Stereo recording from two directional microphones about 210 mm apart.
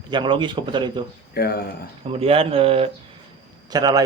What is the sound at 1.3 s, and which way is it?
Speech, 50° left (ahead or behind).